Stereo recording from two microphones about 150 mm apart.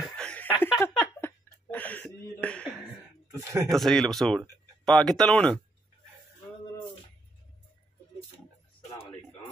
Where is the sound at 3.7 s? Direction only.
Centre (ahead or behind).